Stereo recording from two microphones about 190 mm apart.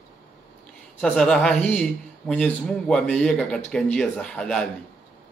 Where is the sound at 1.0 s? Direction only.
5° left (ahead or behind).